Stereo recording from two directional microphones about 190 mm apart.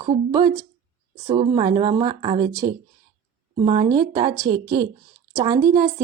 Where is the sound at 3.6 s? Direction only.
35° right (ahead or behind).